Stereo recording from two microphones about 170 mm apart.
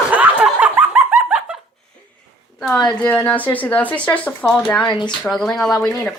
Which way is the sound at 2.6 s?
5° left (ahead or behind).